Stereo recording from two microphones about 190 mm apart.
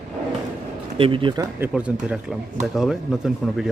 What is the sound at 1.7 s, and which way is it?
Speech, 5° right (ahead or behind).